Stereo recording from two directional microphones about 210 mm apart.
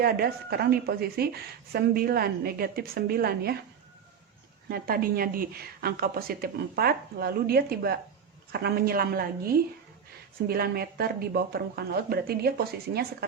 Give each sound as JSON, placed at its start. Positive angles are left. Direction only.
{"t": 0.0, "sound": "speech", "side_deg": -45}
{"t": 4.7, "sound": "speech", "side_deg": -45}
{"t": 10.5, "sound": "speech", "side_deg": -45}